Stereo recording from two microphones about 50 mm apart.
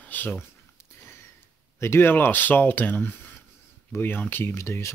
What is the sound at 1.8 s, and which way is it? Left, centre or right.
Speech, left.